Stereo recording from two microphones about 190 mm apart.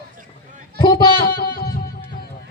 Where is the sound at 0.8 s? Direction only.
25° left (ahead or behind).